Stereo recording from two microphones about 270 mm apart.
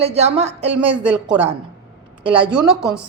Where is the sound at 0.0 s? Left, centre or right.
Right.